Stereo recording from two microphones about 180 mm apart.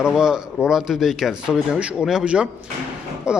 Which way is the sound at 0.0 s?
5° right (ahead or behind).